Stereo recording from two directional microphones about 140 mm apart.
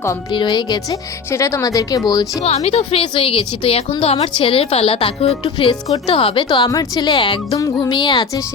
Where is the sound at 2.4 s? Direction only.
50° left (ahead or behind).